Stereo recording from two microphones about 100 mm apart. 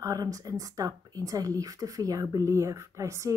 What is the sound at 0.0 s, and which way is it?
Speech, 35° right (ahead or behind).